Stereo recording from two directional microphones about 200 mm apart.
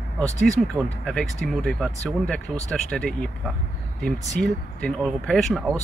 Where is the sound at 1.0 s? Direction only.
Centre (ahead or behind).